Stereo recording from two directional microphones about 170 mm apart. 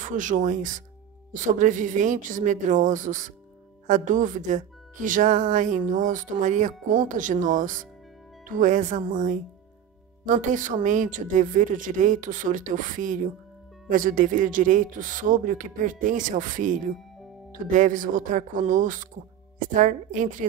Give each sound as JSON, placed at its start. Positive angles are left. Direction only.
{"t": 0.0, "sound": "speech", "side_deg": -50}